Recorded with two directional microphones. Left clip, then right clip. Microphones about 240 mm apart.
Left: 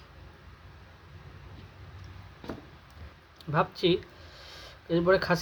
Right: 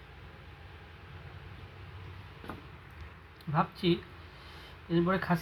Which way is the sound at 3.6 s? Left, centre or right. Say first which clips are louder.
Left 4 dB; left.